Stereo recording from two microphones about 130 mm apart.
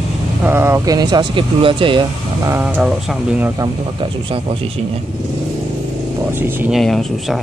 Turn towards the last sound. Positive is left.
turn(degrees=0)  # may be behind; listen again after turning